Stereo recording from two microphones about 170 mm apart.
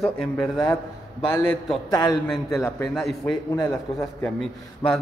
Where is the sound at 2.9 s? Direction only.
Centre (ahead or behind).